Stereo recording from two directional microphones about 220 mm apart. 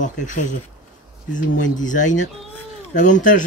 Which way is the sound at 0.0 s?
35° left (ahead or behind).